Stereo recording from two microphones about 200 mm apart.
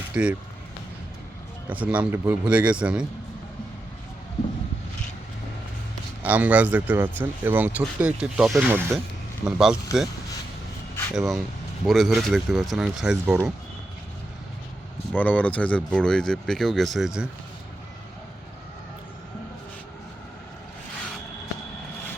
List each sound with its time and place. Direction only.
0.1 s speech: 5° right (ahead or behind)
1.7 s speech: 5° right (ahead or behind)
6.2 s speech: 5° right (ahead or behind)
11.1 s speech: centre (ahead or behind)
15.1 s speech: 10° left (ahead or behind)